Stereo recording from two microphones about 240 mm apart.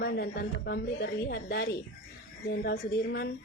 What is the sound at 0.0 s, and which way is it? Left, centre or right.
A woman's voice, left.